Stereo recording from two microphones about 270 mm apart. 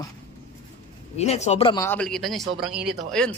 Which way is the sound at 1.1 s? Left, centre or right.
Left.